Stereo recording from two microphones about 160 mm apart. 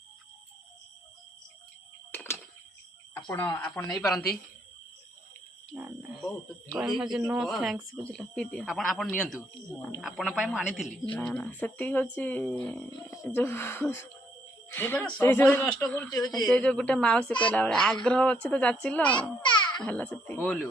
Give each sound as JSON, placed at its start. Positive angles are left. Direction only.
{"t": 2.1, "sound": "a sound", "side_deg": 15}
{"t": 3.6, "sound": "speech", "side_deg": 10}
{"t": 5.7, "sound": "speech", "side_deg": -10}
{"t": 19.4, "sound": "babbling", "side_deg": 30}
{"t": 19.8, "sound": "speech", "side_deg": 10}